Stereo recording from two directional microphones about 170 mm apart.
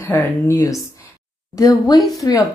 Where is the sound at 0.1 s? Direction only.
15° left (ahead or behind).